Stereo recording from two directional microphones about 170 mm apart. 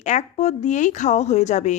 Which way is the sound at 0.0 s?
45° left (ahead or behind).